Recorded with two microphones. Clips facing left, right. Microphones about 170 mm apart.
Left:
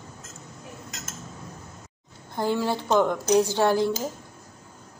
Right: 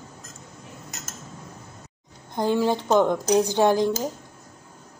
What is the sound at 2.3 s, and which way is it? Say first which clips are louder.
Speech: right 3 dB; 20° right (ahead or behind).